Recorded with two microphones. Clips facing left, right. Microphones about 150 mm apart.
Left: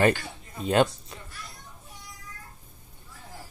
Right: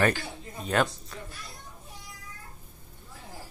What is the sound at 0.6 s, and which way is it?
Speech, 30° left (ahead or behind).